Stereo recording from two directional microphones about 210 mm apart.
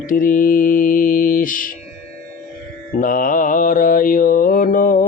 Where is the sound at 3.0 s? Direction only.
40° left (ahead or behind).